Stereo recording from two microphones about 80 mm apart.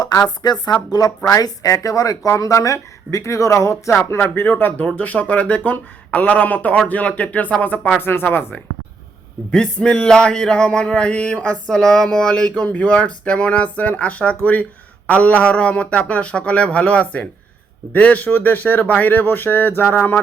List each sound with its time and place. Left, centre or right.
0.0 s a woman's voice: left
3.9 s speech: left
9.5 s speech: centre